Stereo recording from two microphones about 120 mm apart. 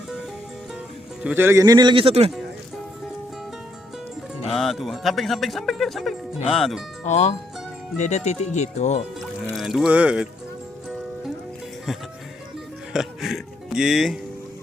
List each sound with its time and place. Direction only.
1.2 s speech: 15° right (ahead or behind)
1.6 s speech: 35° right (ahead or behind); by 2.3 s 55° right (ahead or behind)
4.4 s a man's voice: centre (ahead or behind)
7.0 s speech: 75° left (ahead or behind)
9.6 s a man's voice: centre (ahead or behind)
12.9 s music: 5° right (ahead or behind)